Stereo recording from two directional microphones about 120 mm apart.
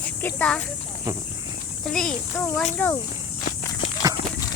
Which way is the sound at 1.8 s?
5° left (ahead or behind).